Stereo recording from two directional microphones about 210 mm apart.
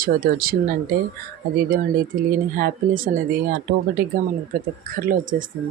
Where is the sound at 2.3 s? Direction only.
45° right (ahead or behind).